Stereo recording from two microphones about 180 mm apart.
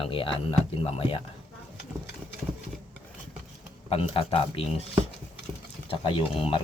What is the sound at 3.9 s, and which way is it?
Speech, 30° left (ahead or behind).